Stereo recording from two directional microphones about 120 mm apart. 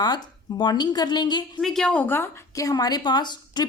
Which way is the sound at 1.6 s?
5° left (ahead or behind).